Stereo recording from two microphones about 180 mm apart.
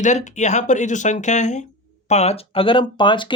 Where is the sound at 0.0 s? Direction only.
40° left (ahead or behind).